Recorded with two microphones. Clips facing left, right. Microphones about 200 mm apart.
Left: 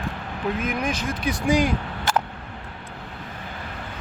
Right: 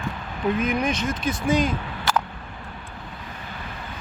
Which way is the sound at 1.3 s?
10° left (ahead or behind).